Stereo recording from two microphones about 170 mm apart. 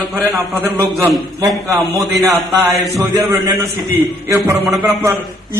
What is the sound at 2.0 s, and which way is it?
Speech, centre (ahead or behind).